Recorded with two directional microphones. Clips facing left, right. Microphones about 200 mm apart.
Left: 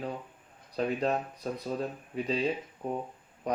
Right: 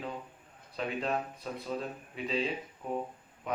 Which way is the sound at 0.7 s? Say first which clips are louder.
Left 4 dB; 40° left (ahead or behind).